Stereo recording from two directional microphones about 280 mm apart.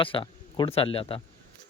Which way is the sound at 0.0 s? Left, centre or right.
Centre.